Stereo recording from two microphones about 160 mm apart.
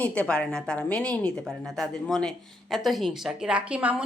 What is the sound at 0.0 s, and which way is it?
A woman's voice, 5° left (ahead or behind).